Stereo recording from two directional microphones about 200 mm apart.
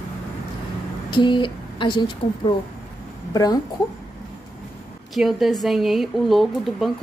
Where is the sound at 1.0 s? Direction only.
25° left (ahead or behind).